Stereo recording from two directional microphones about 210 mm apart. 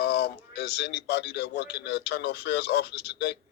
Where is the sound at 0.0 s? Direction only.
50° left (ahead or behind).